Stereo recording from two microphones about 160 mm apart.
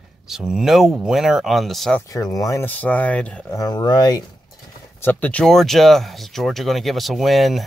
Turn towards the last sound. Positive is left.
turn(degrees=0)  # may be behind; listen again after turning